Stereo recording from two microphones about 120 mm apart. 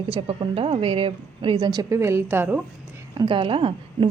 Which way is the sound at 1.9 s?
20° right (ahead or behind).